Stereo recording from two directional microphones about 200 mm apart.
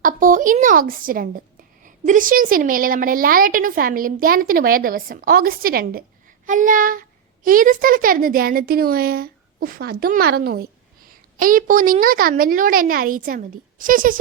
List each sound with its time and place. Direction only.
0.0 s a woman's voice: 40° right (ahead or behind)
6.4 s child singing: 40° right (ahead or behind)
7.4 s a woman's voice: 45° right (ahead or behind)